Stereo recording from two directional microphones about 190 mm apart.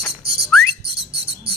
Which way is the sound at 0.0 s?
Centre (ahead or behind).